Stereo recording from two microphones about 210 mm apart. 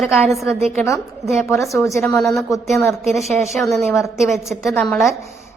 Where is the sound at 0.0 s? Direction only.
Centre (ahead or behind).